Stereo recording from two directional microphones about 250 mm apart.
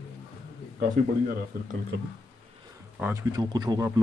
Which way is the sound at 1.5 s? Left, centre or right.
Right.